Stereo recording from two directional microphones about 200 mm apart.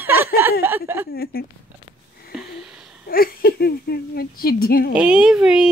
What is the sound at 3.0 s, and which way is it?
Speech, 50° left (ahead or behind).